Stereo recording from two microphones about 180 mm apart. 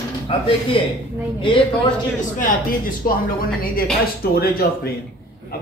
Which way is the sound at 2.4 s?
50° left (ahead or behind).